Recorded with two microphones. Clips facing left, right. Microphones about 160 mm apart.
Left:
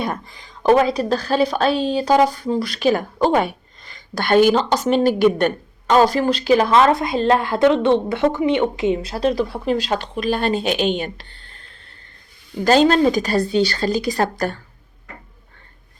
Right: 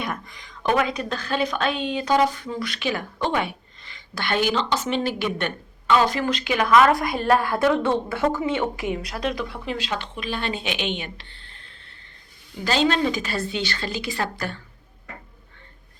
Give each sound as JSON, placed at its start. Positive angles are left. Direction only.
{"t": 0.0, "sound": "a woman's voice", "side_deg": 30}
{"t": 12.6, "sound": "a woman's voice", "side_deg": 45}